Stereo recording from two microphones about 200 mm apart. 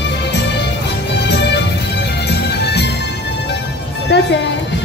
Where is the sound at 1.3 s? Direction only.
60° left (ahead or behind).